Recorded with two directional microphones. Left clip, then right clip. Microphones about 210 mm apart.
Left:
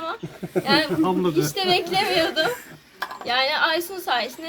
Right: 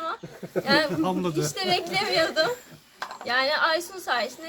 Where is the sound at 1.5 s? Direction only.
Centre (ahead or behind).